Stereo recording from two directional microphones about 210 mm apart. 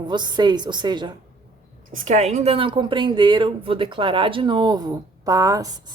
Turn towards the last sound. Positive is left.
turn(degrees=-15)  # may be behind; listen again after turning